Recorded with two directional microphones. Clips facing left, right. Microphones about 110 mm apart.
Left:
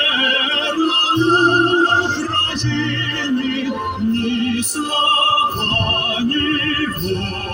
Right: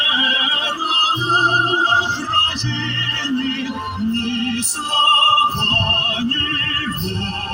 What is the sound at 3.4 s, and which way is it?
Music, centre (ahead or behind).